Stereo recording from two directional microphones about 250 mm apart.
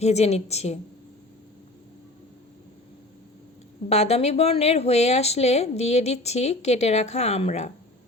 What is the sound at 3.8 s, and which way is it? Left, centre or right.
A woman's voice, left.